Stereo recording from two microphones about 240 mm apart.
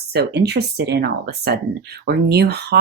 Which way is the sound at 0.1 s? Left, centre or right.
Right.